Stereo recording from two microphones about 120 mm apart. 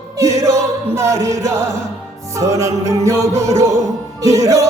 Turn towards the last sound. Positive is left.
turn(degrees=-25)  # may be behind; listen again after turning